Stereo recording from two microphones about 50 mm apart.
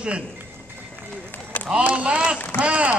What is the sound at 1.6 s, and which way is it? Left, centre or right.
A man's voice, right.